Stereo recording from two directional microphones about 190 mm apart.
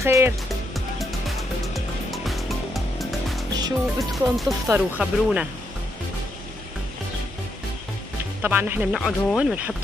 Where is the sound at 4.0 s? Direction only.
Centre (ahead or behind).